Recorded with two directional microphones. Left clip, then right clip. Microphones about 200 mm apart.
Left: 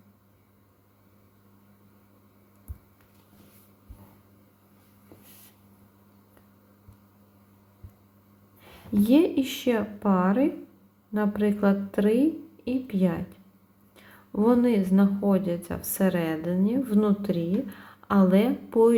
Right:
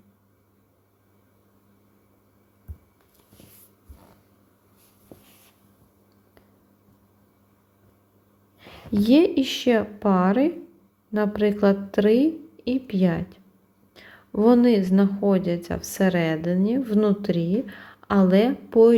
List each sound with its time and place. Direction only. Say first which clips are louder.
9.0 s speech: right 4 dB; 30° right (ahead or behind)